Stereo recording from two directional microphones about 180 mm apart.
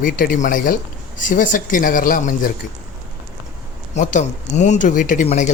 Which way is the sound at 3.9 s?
40° left (ahead or behind).